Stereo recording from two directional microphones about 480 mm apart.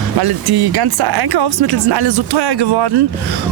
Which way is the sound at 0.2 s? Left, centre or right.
Right.